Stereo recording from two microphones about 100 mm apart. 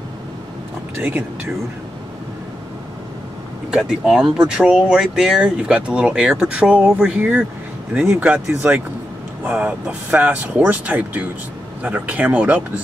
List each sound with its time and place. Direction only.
0.9 s speech: 15° right (ahead or behind)
3.7 s speech: 5° right (ahead or behind)